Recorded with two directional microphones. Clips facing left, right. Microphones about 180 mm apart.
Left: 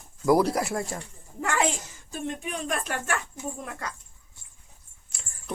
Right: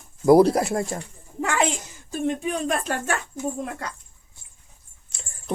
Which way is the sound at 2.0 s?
35° right (ahead or behind).